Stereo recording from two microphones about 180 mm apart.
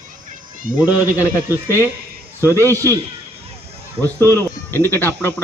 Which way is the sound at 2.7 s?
15° right (ahead or behind).